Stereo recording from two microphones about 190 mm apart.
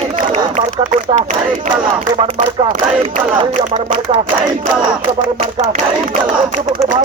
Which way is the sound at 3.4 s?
30° right (ahead or behind).